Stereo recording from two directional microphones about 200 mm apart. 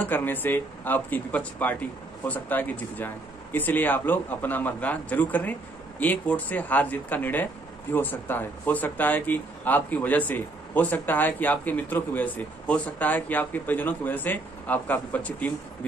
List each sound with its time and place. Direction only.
0.0 s speech: 10° left (ahead or behind)